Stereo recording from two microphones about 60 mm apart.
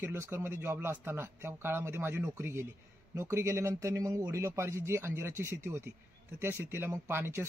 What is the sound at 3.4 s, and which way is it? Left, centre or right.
Speech, right.